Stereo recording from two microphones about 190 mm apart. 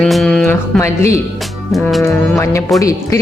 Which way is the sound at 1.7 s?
Centre (ahead or behind).